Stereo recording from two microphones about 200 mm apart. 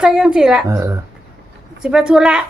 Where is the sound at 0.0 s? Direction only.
5° right (ahead or behind).